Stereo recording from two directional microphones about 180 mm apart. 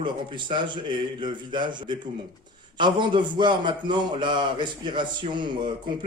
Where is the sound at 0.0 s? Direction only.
25° right (ahead or behind).